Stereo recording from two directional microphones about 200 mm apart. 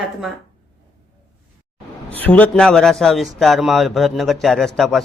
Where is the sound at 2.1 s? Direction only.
10° left (ahead or behind).